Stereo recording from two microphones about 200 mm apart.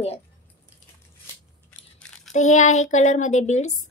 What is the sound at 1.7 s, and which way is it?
Crunch, 5° left (ahead or behind).